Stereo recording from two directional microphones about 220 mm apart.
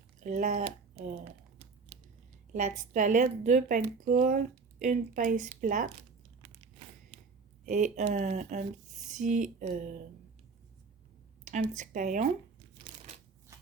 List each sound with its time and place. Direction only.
0.2 s speech: 35° right (ahead or behind)
2.5 s a woman's voice: 35° right (ahead or behind)
7.6 s speech: 35° right (ahead or behind)
11.4 s a woman's voice: 35° right (ahead or behind)